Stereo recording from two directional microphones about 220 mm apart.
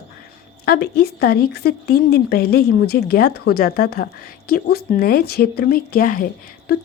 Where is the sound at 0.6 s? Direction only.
45° left (ahead or behind).